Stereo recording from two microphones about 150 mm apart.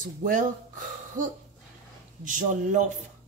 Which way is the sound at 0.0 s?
65° right (ahead or behind).